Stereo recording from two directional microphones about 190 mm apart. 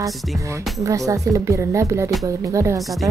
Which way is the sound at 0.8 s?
15° right (ahead or behind).